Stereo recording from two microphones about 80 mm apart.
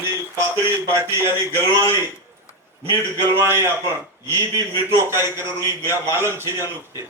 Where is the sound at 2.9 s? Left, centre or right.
Right.